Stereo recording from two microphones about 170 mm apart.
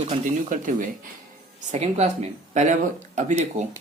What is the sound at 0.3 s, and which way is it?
Speech, 50° right (ahead or behind).